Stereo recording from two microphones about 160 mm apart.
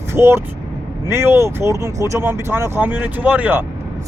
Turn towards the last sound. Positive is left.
turn(degrees=-10)  # may be behind; listen again after turning